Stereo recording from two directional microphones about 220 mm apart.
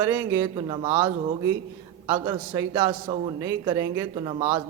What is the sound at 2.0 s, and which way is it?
A man's voice, 20° right (ahead or behind).